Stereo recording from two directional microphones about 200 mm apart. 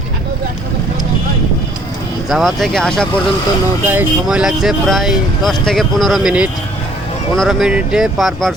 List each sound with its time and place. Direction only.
2.3 s speech: centre (ahead or behind)
3.8 s speech: 10° right (ahead or behind)